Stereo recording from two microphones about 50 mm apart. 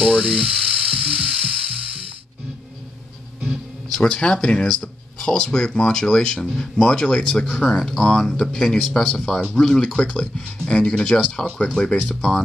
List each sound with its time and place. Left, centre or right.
0.0 s music: right
3.9 s speech: centre
12.2 s speech: centre